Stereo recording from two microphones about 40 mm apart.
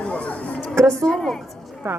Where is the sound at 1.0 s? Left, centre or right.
Centre.